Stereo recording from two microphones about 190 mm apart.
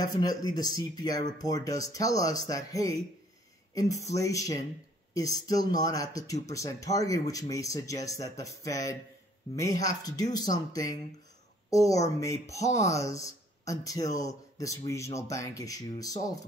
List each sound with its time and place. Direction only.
0.4 s speech: 20° left (ahead or behind)